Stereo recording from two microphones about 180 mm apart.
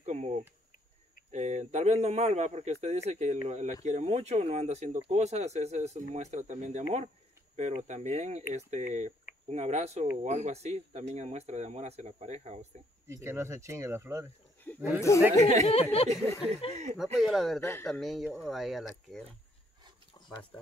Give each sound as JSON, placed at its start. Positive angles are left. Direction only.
{"t": 0.0, "sound": "a sound", "side_deg": -40}
{"t": 1.3, "sound": "speech", "side_deg": -40}
{"t": 13.1, "sound": "speech", "side_deg": -15}
{"t": 15.0, "sound": "speech", "side_deg": 15}
{"t": 15.3, "sound": "speech", "side_deg": -40}
{"t": 15.7, "sound": "speech", "side_deg": 30}
{"t": 17.2, "sound": "speech", "side_deg": 0}
{"t": 17.6, "sound": "speech", "side_deg": 15}
{"t": 17.8, "sound": "speech", "side_deg": 0}
{"t": 20.2, "sound": "a sound", "side_deg": 25}